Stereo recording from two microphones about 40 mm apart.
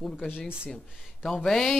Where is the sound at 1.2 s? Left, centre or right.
Centre.